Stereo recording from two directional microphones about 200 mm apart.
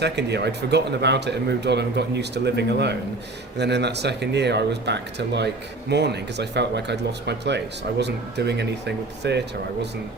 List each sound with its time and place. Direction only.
0.0 s speech: 55° right (ahead or behind)